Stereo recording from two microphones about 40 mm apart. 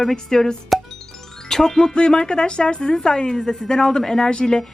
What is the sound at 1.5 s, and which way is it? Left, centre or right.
Speech, centre.